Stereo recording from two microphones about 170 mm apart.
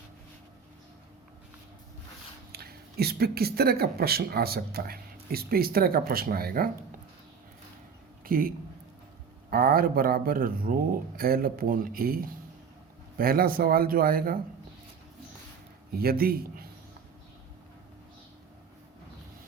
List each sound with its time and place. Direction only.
2.5 s speech: 65° right (ahead or behind)
8.2 s a man's voice: 55° right (ahead or behind)
15.9 s speech: 65° right (ahead or behind)